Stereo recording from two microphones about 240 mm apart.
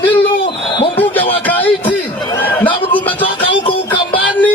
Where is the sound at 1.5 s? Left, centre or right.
Centre.